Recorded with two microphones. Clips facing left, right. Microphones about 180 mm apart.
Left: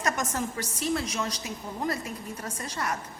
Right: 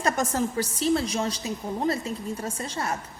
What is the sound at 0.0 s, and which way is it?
A woman's voice, 30° right (ahead or behind).